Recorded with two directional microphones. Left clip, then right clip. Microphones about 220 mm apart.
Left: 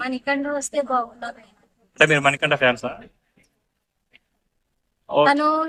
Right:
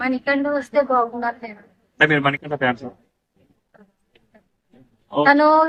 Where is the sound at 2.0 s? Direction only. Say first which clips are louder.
Left 1 dB; 60° left (ahead or behind).